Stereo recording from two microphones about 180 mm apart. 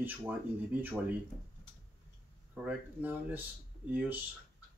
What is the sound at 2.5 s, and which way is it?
Speech, 10° right (ahead or behind).